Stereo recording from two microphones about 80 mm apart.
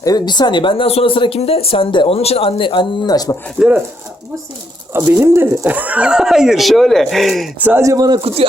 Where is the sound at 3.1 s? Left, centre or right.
Left.